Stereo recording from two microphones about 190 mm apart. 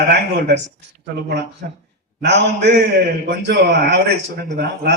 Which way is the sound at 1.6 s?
50° right (ahead or behind).